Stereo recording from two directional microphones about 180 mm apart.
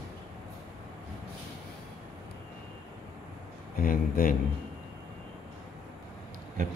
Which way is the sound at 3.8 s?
55° left (ahead or behind).